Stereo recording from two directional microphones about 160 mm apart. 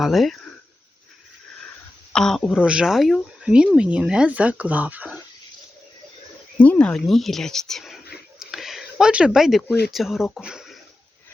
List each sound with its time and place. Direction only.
0.0 s speech: centre (ahead or behind)
2.1 s speech: 5° left (ahead or behind)
6.6 s speech: 10° left (ahead or behind)
8.4 s a sound: centre (ahead or behind)
9.9 s speech: centre (ahead or behind)